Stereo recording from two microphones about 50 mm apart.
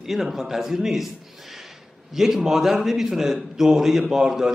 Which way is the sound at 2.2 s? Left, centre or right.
Centre.